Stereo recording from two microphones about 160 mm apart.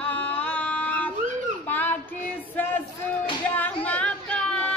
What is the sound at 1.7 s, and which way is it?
Child singing, 10° left (ahead or behind).